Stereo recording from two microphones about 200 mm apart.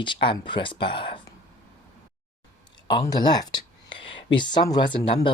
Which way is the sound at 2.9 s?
20° left (ahead or behind).